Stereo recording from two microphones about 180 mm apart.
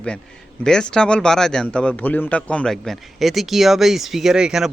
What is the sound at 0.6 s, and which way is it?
A man's voice, 5° left (ahead or behind).